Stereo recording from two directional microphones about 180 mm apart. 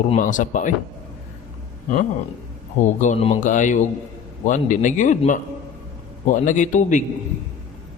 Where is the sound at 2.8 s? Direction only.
40° left (ahead or behind).